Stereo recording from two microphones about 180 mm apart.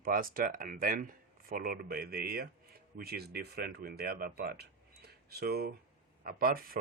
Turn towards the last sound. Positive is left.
turn(degrees=-55)  # may be behind; listen again after turning